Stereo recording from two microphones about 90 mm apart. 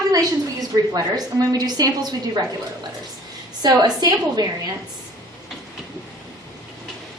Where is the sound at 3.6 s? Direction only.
50° right (ahead or behind).